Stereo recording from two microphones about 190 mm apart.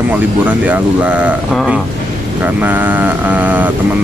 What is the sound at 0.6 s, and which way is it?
Speech, 5° right (ahead or behind).